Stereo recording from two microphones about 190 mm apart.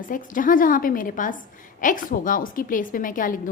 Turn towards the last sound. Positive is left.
turn(degrees=45)  # may be behind; listen again after turning